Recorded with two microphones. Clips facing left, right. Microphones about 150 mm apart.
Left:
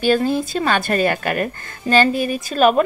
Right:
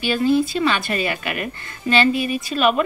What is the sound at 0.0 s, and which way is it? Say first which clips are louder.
A woman's voice: left 1 dB; 45° left (ahead or behind).